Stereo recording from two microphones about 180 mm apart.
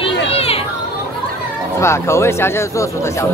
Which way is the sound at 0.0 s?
35° left (ahead or behind).